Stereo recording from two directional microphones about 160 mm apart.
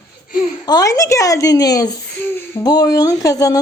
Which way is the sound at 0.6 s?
25° left (ahead or behind).